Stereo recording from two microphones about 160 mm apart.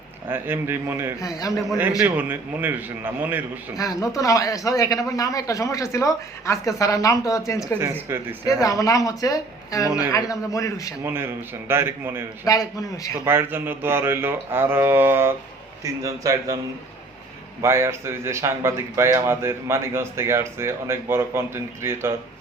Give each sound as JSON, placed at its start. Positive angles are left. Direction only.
{"t": 0.3, "sound": "speech", "side_deg": -10}
{"t": 1.2, "sound": "speech", "side_deg": 20}
{"t": 2.0, "sound": "speech", "side_deg": -10}
{"t": 3.8, "sound": "speech", "side_deg": 20}
{"t": 8.0, "sound": "speech", "side_deg": -15}
{"t": 8.6, "sound": "speech", "side_deg": 20}
{"t": 11.0, "sound": "speech", "side_deg": -15}
{"t": 12.5, "sound": "speech", "side_deg": 20}
{"t": 13.2, "sound": "speech", "side_deg": -15}
{"t": 17.6, "sound": "speech", "side_deg": -15}